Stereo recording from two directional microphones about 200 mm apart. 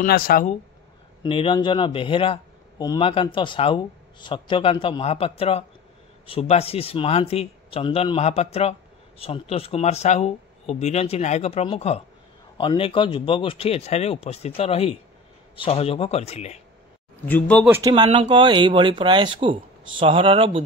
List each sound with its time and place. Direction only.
0.0 s speech: 45° left (ahead or behind)
1.2 s speech: 25° left (ahead or behind)
17.3 s speech: 5° left (ahead or behind)
17.9 s speech: 30° right (ahead or behind)